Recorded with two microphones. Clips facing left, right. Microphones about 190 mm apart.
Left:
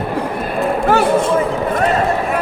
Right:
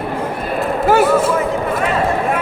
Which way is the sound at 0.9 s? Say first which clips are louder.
Right 2 dB; 5° right (ahead or behind).